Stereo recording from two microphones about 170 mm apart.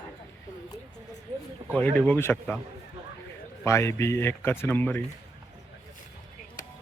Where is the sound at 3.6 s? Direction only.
15° left (ahead or behind).